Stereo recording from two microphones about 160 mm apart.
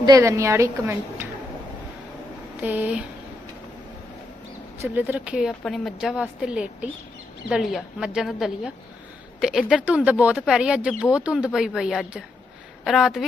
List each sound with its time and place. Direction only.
0.0 s a woman's voice: 20° right (ahead or behind)
2.6 s a woman's voice: 10° right (ahead or behind)
4.8 s a woman's voice: 10° right (ahead or behind)